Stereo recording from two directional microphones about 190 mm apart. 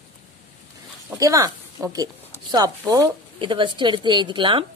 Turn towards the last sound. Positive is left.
turn(degrees=-25)  # may be behind; listen again after turning